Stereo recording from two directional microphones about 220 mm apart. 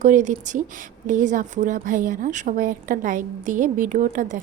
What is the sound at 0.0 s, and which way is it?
Speech, 35° right (ahead or behind).